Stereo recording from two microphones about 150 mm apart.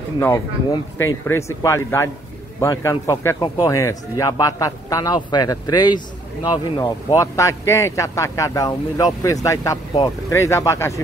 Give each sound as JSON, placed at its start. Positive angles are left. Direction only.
{"t": 0.2, "sound": "a man's voice", "side_deg": 20}